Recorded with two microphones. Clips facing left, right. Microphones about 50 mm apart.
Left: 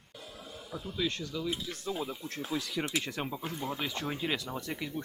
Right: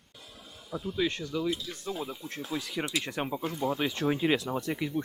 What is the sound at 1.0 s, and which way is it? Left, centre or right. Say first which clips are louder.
Speech: right 4 dB; centre.